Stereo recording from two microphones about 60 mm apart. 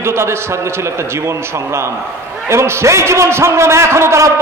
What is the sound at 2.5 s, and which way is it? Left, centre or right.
A man's voice, right.